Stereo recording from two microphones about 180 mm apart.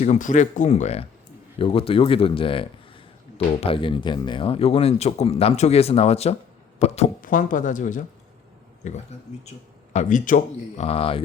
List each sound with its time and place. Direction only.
0.0 s speech: 40° left (ahead or behind)
7.2 s speech: 50° left (ahead or behind)
10.8 s speech: 30° left (ahead or behind)